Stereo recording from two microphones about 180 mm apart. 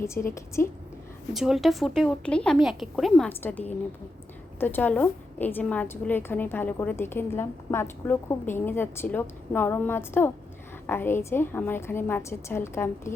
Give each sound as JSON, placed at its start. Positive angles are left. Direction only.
{"t": 0.0, "sound": "a woman's voice", "side_deg": 15}
{"t": 1.3, "sound": "a woman's voice", "side_deg": 0}